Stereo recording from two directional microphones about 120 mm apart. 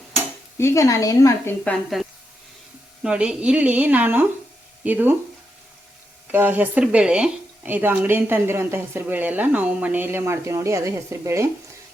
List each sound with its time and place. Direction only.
0.6 s speech: 25° left (ahead or behind)
2.0 s a sound: 5° right (ahead or behind)
3.0 s speech: 5° right (ahead or behind)
6.3 s speech: 15° right (ahead or behind)